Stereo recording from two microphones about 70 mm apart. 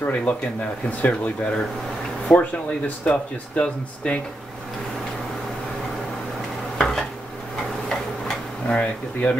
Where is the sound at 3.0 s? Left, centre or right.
Centre.